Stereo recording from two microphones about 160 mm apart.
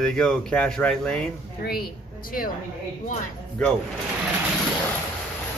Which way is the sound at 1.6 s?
70° left (ahead or behind).